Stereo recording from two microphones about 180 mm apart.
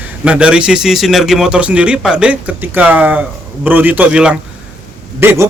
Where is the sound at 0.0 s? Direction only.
5° right (ahead or behind).